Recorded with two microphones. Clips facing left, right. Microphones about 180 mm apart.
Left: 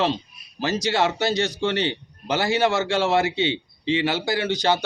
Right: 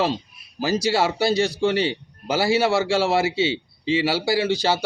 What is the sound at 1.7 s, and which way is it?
Speech, 35° right (ahead or behind).